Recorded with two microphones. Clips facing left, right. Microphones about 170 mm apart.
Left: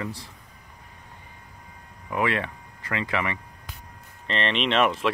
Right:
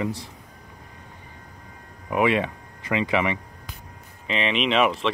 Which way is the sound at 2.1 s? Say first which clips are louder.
Right 5 dB; 15° right (ahead or behind).